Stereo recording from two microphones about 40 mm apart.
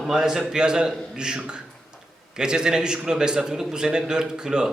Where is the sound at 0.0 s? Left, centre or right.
Centre.